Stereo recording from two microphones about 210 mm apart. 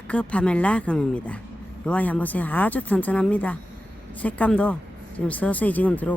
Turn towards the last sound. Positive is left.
turn(degrees=5)  # may be behind; listen again after turning